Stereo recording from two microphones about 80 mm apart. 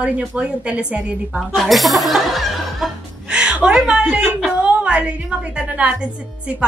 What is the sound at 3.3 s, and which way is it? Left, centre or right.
Music, centre.